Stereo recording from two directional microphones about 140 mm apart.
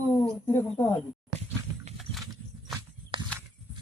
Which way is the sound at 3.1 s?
40° right (ahead or behind).